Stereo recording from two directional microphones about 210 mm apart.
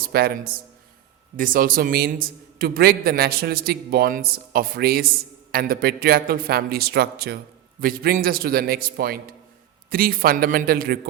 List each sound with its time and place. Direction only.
0.1 s a man's voice: 50° right (ahead or behind)